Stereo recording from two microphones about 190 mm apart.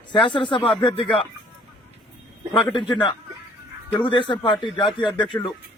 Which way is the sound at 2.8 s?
25° left (ahead or behind).